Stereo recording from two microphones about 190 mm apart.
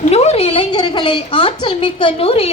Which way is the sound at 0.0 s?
35° left (ahead or behind).